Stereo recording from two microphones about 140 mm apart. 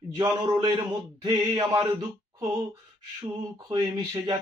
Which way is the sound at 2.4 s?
25° right (ahead or behind).